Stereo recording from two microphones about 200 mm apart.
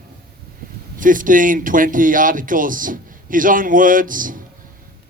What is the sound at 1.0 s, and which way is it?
Speech, 40° right (ahead or behind).